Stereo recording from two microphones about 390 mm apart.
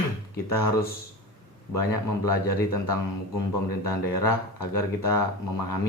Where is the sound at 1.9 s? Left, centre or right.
Left.